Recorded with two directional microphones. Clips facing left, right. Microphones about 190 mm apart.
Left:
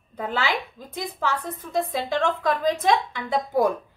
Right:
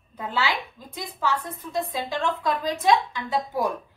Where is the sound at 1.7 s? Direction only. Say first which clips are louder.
Left 3 dB; 50° left (ahead or behind).